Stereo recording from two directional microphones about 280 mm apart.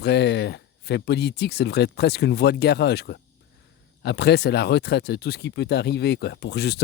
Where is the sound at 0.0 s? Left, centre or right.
Left.